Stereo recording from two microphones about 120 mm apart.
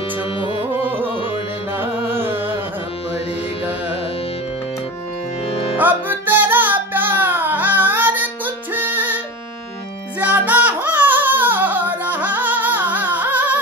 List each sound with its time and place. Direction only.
0.8 s music: 15° right (ahead or behind)
1.8 s carnatic music: 20° right (ahead or behind)
5.8 s music: 15° right (ahead or behind)
10.2 s music: 10° right (ahead or behind)